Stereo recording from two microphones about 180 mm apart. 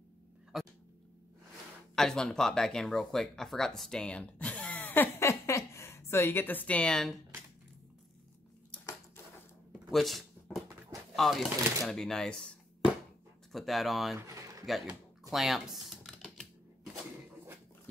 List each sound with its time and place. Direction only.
0.5 s dog: centre (ahead or behind)
2.0 s speech: 5° left (ahead or behind)
9.7 s a sound: centre (ahead or behind)
11.1 s speech: centre (ahead or behind)
14.2 s a sound: 15° right (ahead or behind)
14.7 s typing: centre (ahead or behind)